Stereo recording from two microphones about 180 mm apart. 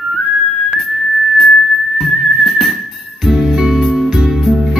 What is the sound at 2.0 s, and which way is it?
Whistling, centre (ahead or behind).